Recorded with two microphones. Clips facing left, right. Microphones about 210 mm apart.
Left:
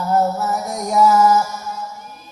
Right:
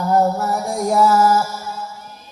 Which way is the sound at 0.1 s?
15° right (ahead or behind).